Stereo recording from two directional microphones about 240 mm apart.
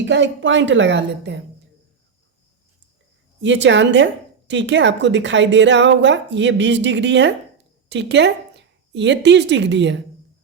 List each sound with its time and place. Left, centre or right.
0.0 s speech: right
3.4 s speech: right